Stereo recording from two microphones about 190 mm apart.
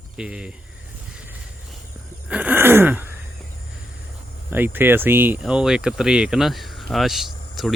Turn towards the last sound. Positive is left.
turn(degrees=0)  # may be behind; listen again after turning